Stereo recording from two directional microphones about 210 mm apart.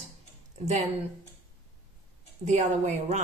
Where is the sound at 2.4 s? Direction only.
35° right (ahead or behind).